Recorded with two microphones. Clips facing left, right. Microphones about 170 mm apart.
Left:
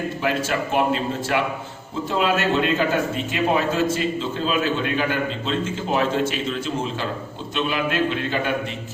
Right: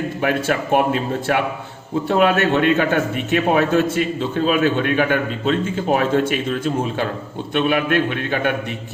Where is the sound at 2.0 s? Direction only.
60° right (ahead or behind).